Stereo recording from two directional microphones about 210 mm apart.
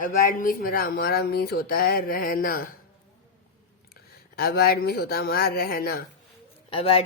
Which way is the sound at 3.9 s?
45° left (ahead or behind).